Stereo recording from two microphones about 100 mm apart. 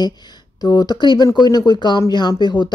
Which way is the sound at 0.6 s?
45° left (ahead or behind).